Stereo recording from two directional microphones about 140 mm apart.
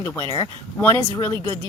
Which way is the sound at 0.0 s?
20° left (ahead or behind).